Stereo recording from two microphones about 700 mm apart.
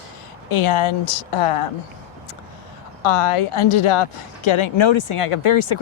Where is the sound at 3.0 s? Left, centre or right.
Left.